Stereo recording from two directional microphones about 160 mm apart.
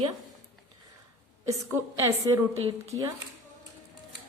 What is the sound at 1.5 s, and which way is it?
Speech, 20° right (ahead or behind).